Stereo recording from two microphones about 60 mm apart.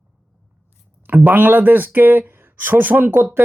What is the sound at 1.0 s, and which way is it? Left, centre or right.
Speech, right.